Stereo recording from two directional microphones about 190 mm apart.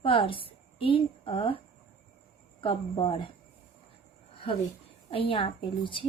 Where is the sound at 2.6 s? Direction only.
25° left (ahead or behind).